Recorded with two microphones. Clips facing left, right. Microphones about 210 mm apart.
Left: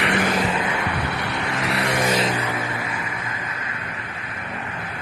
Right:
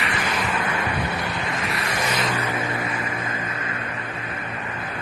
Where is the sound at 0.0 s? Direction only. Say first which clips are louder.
Left 5 dB; 65° left (ahead or behind).